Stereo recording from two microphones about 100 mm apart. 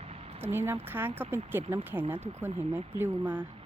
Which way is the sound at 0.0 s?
85° right.